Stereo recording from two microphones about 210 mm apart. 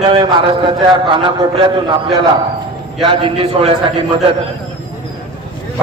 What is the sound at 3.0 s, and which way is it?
Speech, 25° right (ahead or behind).